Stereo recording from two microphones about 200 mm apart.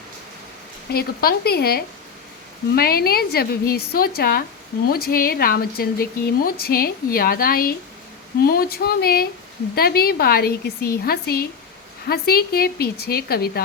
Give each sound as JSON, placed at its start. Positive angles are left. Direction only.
{"t": 0.9, "sound": "a woman's voice", "side_deg": 50}